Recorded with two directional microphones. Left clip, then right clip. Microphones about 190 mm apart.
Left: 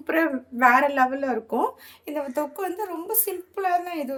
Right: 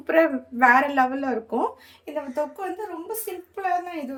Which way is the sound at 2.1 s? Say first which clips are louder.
Even; 35° left (ahead or behind).